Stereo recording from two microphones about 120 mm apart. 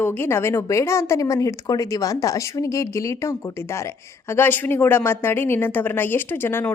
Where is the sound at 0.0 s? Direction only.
20° left (ahead or behind).